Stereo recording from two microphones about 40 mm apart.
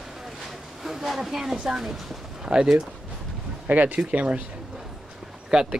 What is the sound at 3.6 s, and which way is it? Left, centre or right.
Speech, right.